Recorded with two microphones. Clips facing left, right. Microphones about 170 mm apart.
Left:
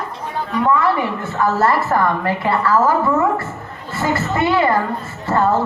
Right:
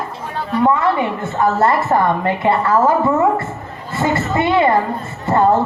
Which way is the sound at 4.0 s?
25° right (ahead or behind).